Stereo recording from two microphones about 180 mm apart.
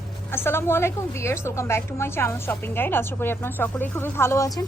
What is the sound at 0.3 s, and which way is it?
A woman's voice, 15° left (ahead or behind).